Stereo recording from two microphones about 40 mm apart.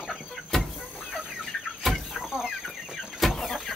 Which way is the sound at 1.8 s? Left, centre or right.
Centre.